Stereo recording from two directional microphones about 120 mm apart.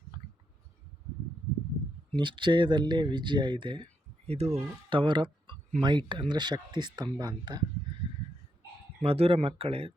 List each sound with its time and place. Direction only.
2.1 s speech: 40° right (ahead or behind)
4.3 s speech: 60° right (ahead or behind)
4.9 s speech: 45° right (ahead or behind)
9.0 s speech: 55° right (ahead or behind)